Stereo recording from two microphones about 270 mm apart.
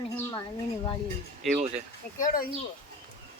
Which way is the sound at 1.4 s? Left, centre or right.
Centre.